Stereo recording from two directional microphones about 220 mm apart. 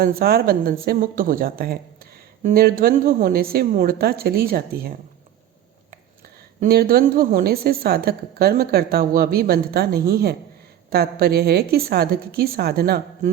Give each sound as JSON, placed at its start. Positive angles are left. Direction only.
{"t": 0.0, "sound": "a woman's voice", "side_deg": -45}
{"t": 6.6, "sound": "a woman's voice", "side_deg": -45}